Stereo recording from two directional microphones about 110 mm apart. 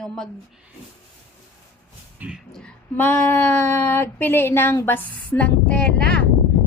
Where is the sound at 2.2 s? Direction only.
10° right (ahead or behind).